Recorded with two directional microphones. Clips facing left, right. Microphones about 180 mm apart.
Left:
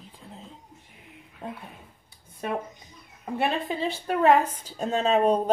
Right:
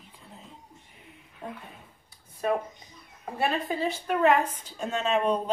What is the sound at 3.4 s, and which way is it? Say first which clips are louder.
A woman's voice: left 1 dB; 35° left (ahead or behind).